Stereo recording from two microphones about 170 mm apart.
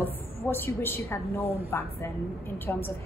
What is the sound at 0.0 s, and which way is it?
A woman's voice, 15° left (ahead or behind).